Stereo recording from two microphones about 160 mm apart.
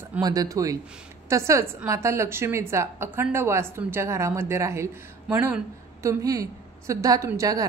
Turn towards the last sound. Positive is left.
turn(degrees=-20)  # may be behind; listen again after turning